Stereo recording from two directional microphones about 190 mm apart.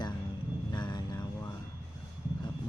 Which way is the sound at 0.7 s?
20° left (ahead or behind).